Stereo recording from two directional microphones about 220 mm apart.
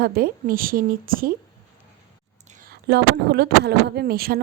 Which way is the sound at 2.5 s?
40° right (ahead or behind).